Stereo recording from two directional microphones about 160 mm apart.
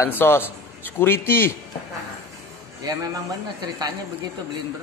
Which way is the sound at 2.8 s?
25° right (ahead or behind).